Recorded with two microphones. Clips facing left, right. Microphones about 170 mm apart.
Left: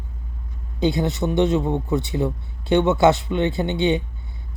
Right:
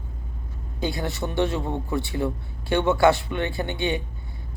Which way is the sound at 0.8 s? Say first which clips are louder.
Left 7 dB; 20° left (ahead or behind).